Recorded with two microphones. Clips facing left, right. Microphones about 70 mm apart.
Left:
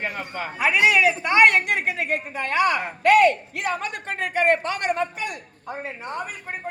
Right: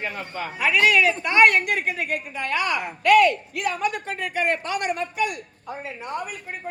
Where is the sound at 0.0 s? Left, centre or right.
Left.